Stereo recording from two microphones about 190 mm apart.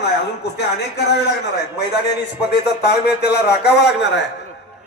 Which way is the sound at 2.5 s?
60° left (ahead or behind).